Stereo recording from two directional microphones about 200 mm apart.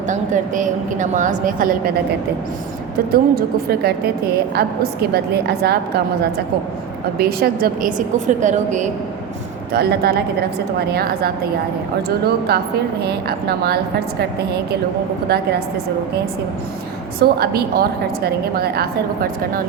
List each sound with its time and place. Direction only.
0.1 s a woman's voice: 40° right (ahead or behind)
3.1 s a woman's voice: 50° right (ahead or behind)
7.2 s a woman's voice: 50° right (ahead or behind)
9.7 s a woman's voice: 50° right (ahead or behind)
12.5 s a woman's voice: 55° right (ahead or behind)
17.2 s a woman's voice: 50° right (ahead or behind)